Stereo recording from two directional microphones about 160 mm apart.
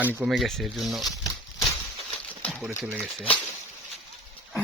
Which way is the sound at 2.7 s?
10° right (ahead or behind).